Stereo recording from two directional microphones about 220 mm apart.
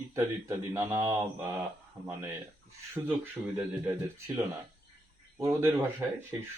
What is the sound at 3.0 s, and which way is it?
Speech, 10° right (ahead or behind).